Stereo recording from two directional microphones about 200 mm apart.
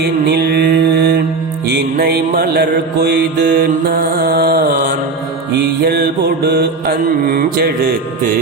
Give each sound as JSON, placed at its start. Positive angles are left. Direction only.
{"t": 0.0, "sound": "mantra", "side_deg": -55}